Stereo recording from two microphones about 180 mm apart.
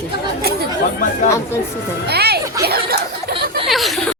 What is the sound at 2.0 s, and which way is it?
Speech, 60° right (ahead or behind).